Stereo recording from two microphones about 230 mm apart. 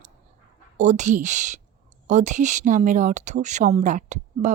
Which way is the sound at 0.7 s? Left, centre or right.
Right.